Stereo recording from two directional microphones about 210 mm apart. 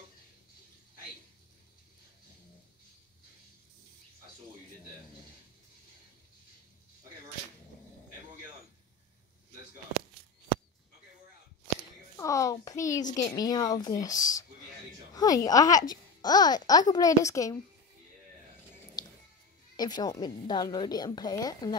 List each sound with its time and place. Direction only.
12.2 s a sound: 15° left (ahead or behind)
13.1 s a woman's voice: 15° left (ahead or behind)
19.0 s music: 20° left (ahead or behind)
19.8 s a woman's voice: 20° left (ahead or behind)